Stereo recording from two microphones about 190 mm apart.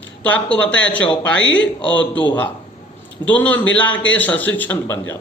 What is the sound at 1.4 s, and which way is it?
Speech, 80° left.